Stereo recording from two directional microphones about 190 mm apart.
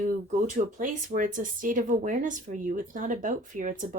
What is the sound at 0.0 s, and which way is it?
Speech, 40° right (ahead or behind).